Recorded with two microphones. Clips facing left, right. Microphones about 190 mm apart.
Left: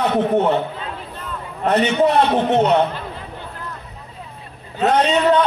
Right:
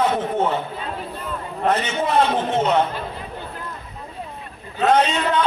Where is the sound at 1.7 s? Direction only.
65° left (ahead or behind).